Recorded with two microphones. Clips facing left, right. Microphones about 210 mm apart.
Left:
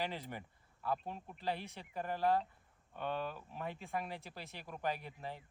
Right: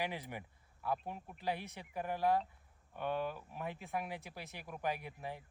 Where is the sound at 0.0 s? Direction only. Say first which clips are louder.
Even; 15° right (ahead or behind).